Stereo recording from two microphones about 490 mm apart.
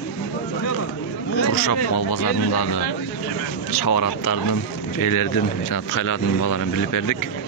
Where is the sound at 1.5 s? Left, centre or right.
Left.